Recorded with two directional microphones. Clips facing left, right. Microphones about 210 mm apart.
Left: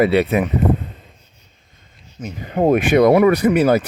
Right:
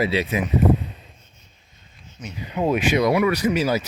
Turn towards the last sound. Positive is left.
turn(degrees=55)  # may be behind; listen again after turning